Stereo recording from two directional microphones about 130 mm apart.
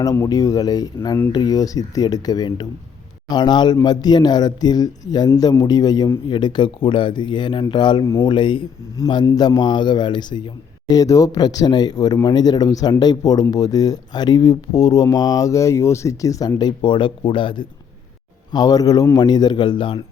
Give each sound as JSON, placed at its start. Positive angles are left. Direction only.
{"t": 0.0, "sound": "a man's voice", "side_deg": 25}
{"t": 9.2, "sound": "a man's voice", "side_deg": 25}